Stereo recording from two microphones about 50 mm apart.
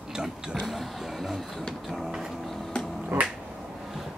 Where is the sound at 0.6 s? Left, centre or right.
Centre.